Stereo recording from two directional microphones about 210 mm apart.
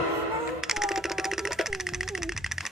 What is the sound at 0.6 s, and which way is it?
Bird, centre (ahead or behind).